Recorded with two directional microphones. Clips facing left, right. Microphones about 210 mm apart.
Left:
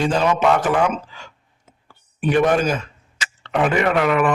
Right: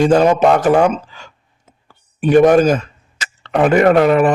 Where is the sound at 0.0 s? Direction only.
45° right (ahead or behind).